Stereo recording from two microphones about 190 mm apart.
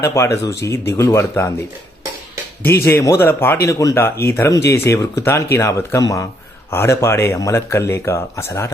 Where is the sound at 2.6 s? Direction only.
10° left (ahead or behind).